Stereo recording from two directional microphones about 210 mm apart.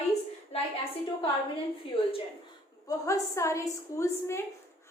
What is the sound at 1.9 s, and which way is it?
Speech, 25° left (ahead or behind).